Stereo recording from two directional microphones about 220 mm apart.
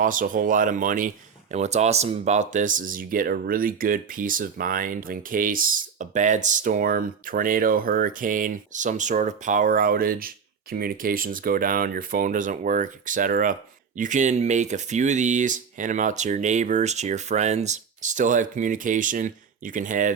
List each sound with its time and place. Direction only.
0.0 s speech: 40° right (ahead or behind)